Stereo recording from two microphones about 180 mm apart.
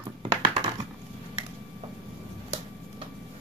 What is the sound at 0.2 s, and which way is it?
Computer keyboard, 30° right (ahead or behind).